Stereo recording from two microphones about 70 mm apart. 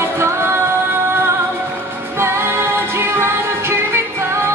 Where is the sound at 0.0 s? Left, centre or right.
Right.